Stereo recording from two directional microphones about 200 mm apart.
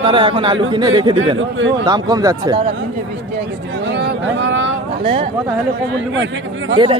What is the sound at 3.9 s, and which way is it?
Speech, 65° right (ahead or behind).